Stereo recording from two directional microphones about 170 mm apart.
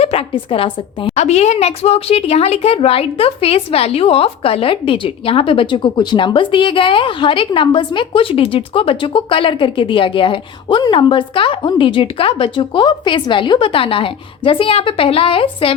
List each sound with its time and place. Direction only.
0.0 s a woman's voice: 35° left (ahead or behind)